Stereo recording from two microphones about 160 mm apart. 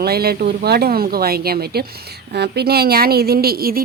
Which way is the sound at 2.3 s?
90° right.